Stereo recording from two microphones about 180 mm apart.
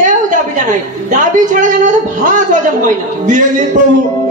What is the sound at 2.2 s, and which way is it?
A man's voice, 45° right (ahead or behind).